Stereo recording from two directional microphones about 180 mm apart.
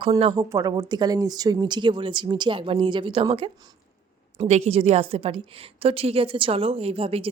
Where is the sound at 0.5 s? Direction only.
20° right (ahead or behind).